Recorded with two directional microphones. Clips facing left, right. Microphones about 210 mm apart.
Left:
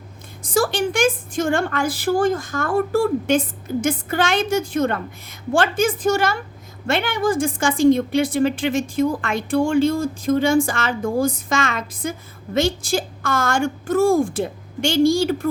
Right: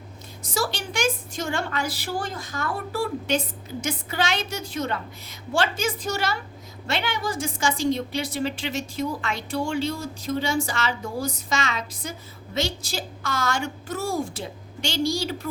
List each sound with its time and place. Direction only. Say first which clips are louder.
0.4 s a woman's voice: left 9 dB; 50° left (ahead or behind)